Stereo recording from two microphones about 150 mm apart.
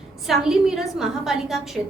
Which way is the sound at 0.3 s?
5° right (ahead or behind).